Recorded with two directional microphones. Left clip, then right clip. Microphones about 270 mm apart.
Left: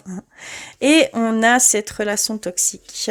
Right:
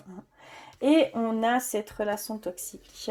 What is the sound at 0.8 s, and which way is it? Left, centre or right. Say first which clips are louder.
Speech: left 8 dB; left.